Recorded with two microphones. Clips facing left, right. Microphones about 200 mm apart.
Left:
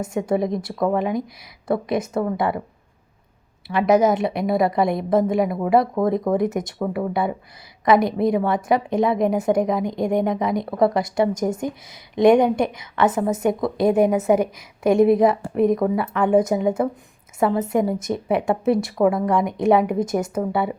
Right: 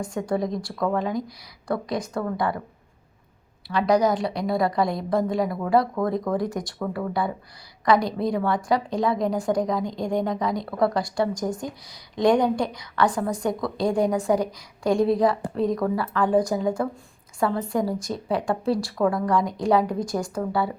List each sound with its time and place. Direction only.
0.0 s a woman's voice: 20° left (ahead or behind)
3.7 s a woman's voice: 20° left (ahead or behind)